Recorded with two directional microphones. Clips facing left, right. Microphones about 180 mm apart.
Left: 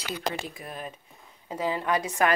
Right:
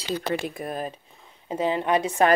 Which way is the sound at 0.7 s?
40° right (ahead or behind).